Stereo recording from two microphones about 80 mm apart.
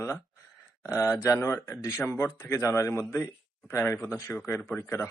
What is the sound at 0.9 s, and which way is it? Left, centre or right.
Speech, left.